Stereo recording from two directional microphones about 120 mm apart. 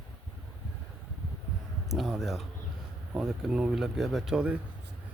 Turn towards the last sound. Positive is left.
turn(degrees=-5)  # may be behind; listen again after turning